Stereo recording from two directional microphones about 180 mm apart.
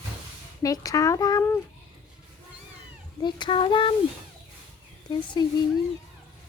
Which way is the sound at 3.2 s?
25° left (ahead or behind).